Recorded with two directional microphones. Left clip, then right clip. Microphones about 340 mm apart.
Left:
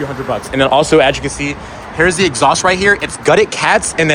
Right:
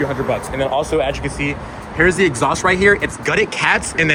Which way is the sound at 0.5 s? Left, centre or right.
Left.